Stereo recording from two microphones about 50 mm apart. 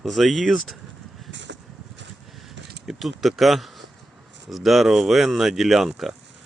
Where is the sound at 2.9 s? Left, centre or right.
Centre.